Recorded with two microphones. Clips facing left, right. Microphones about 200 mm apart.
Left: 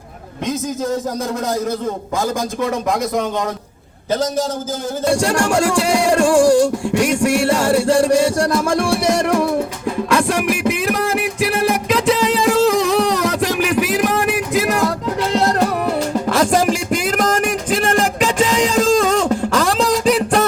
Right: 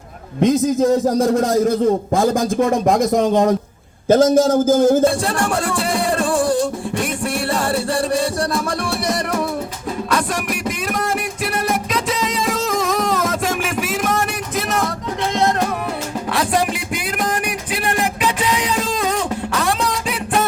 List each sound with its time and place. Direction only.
0.3 s speech: 35° right (ahead or behind)
4.1 s a man's voice: 45° right (ahead or behind)
16.3 s music: 45° left (ahead or behind)